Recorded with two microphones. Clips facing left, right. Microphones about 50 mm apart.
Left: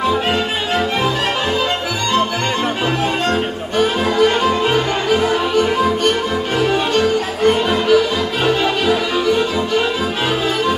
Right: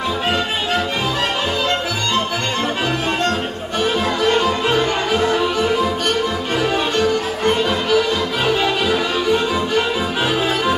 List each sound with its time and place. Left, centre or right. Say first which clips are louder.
4.2 s music: left 4 dB; centre